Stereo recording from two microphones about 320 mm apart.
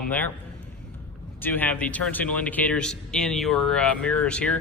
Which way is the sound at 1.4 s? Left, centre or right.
Centre.